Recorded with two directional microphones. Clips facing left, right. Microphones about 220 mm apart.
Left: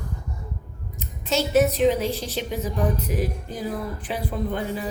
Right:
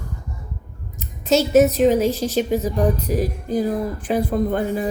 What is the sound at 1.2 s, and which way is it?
A woman's voice, 40° right (ahead or behind).